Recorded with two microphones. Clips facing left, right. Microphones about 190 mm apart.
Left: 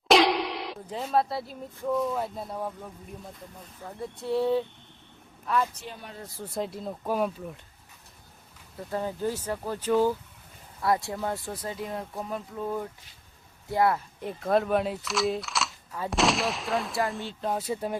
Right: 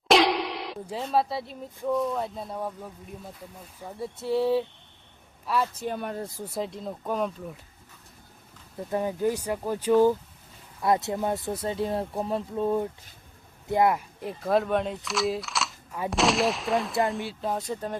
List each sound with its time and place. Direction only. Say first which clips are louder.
0.1 s speech: even; centre (ahead or behind)
5.8 s speech: right 10 dB; 55° right (ahead or behind)
6.4 s speech: left 4 dB; 5° right (ahead or behind)
8.9 s speech: right 4 dB; 15° right (ahead or behind)
14.2 s speech: left 1 dB; centre (ahead or behind)